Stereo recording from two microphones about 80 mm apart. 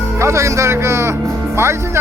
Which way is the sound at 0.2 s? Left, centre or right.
Right.